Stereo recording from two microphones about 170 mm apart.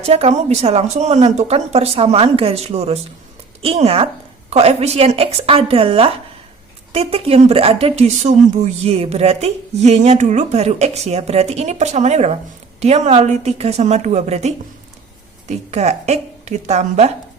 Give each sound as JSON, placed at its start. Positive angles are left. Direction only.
{"t": 0.0, "sound": "a woman's voice", "side_deg": -35}